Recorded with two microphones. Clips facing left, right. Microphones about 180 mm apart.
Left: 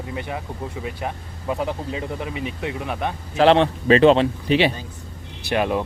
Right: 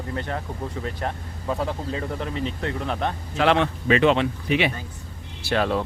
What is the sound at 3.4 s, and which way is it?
Speech, 35° left (ahead or behind).